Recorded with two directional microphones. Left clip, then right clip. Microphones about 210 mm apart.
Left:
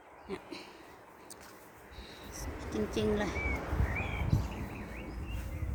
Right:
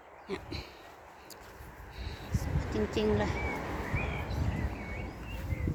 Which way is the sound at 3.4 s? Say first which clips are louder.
Right 1 dB; 55° right (ahead or behind).